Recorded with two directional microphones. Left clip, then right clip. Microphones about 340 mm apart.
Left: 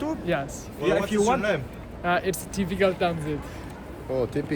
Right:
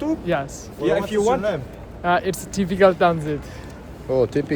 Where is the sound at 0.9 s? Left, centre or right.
Right.